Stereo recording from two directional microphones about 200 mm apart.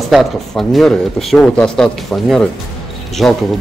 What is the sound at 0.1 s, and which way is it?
Speech, centre (ahead or behind).